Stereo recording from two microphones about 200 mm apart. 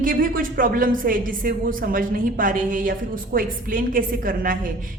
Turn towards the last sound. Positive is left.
turn(degrees=-45)  # may be behind; listen again after turning